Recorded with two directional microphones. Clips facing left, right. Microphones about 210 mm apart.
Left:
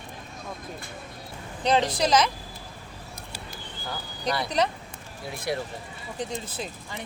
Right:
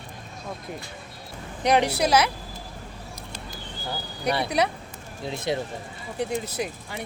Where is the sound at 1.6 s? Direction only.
15° right (ahead or behind).